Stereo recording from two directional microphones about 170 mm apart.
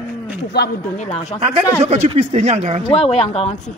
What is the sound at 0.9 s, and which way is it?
Speech, 40° left (ahead or behind).